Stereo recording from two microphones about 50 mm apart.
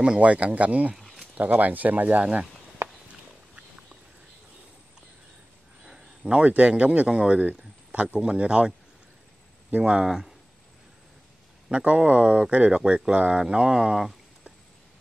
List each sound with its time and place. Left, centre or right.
0.0 s speech: right
1.0 s a sound: centre
1.3 s speech: right
5.9 s a man's voice: centre
10.0 s speech: centre
11.7 s speech: right